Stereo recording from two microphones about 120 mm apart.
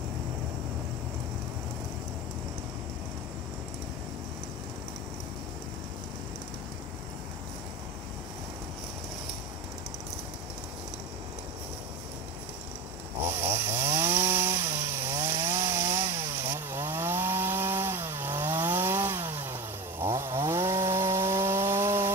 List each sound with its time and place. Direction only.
13.3 s chainsaw: 20° right (ahead or behind)